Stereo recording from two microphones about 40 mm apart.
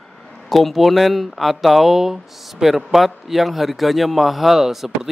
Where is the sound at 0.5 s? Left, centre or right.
Centre.